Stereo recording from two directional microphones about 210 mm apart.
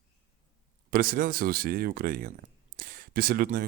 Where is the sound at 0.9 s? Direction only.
45° right (ahead or behind).